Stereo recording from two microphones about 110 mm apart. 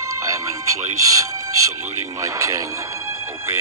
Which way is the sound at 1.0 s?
30° right (ahead or behind).